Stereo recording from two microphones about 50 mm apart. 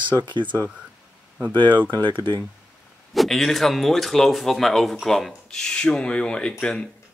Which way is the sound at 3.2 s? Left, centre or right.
Centre.